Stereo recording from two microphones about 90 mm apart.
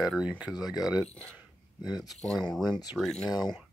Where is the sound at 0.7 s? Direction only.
45° left (ahead or behind).